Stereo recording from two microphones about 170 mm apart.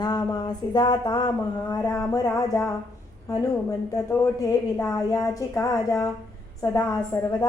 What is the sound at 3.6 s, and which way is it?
Speech, 20° left (ahead or behind).